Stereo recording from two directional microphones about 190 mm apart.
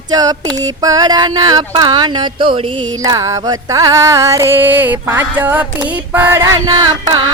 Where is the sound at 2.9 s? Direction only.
20° right (ahead or behind).